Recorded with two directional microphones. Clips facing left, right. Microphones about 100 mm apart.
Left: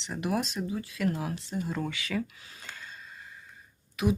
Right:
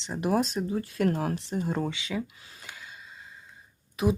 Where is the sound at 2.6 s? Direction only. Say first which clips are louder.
Even; 10° right (ahead or behind).